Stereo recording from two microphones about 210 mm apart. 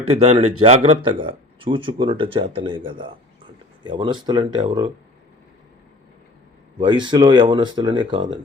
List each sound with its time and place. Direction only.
0.1 s speech: 30° right (ahead or behind)
6.7 s speech: 20° right (ahead or behind)